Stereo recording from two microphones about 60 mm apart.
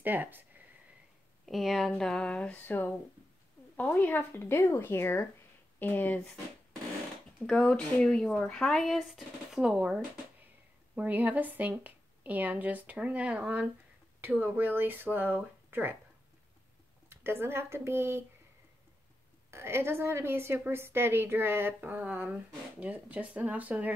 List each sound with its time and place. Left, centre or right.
0.0 s speech: right
1.4 s speech: centre
1.9 s speech: centre
2.6 s speech: left
5.8 s speech: left
6.2 s speech: centre
11.0 s speech: right
14.3 s a woman's voice: right
17.1 s speech: right
19.5 s a woman's voice: right